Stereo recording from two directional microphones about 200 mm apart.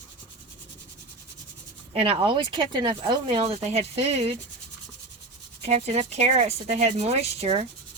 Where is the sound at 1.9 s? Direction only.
30° right (ahead or behind).